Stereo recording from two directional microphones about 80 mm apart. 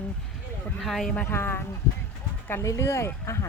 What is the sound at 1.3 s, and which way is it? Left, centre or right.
Speech, left.